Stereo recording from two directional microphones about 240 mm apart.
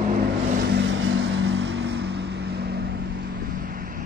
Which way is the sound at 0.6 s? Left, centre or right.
Right.